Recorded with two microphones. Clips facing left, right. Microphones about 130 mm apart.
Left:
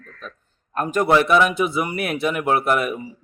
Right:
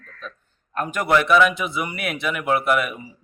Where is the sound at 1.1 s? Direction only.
25° left (ahead or behind).